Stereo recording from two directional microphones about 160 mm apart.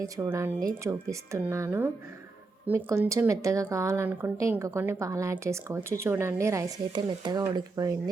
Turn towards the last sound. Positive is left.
turn(degrees=-20)  # may be behind; listen again after turning